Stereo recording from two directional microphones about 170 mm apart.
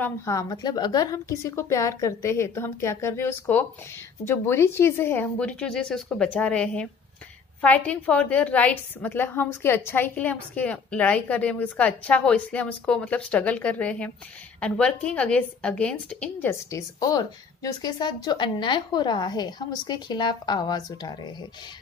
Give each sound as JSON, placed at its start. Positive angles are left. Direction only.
{"t": 0.0, "sound": "a woman's voice", "side_deg": 20}